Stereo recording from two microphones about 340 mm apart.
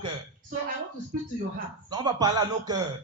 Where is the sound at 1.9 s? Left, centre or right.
Centre.